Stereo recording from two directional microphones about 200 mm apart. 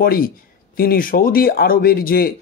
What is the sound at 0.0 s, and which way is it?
Speech, 45° left (ahead or behind).